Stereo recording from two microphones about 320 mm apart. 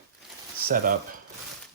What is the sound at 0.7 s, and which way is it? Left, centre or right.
Speech, right.